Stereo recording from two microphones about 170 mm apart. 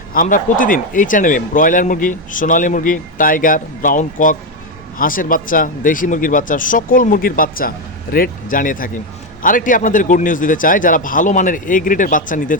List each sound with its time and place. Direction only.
0.1 s speech: 50° left (ahead or behind)